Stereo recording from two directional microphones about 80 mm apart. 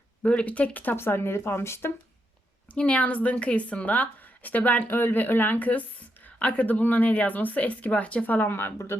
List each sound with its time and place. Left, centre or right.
0.2 s speech: centre; by 1.9 s left
2.7 s speech: centre; by 9.0 s left